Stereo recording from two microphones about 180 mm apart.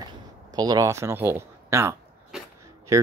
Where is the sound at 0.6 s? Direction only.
20° right (ahead or behind).